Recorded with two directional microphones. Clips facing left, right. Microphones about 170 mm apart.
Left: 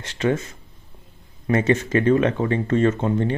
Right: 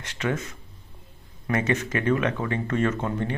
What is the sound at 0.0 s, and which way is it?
Speech, 30° left (ahead or behind).